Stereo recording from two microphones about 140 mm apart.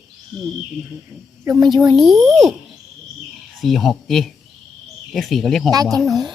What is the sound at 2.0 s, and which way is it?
Speech, centre (ahead or behind).